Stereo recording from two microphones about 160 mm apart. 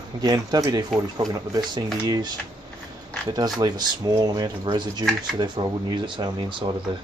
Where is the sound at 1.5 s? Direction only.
25° right (ahead or behind).